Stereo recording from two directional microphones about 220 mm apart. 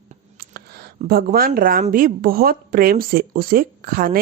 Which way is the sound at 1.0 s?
45° right (ahead or behind).